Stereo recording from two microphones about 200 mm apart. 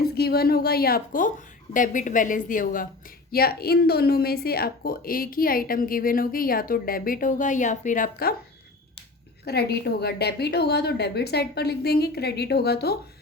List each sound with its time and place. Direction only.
0.1 s a woman's voice: 50° left (ahead or behind)
9.4 s a woman's voice: 55° left (ahead or behind)